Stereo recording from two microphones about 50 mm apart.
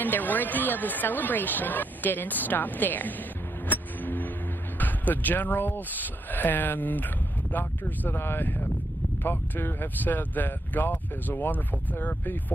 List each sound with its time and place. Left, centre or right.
0.0 s speech: left
3.6 s vehicle: left
4.7 s speech: left